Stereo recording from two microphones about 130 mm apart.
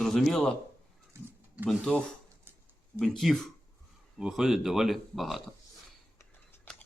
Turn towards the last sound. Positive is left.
turn(degrees=5)  # may be behind; listen again after turning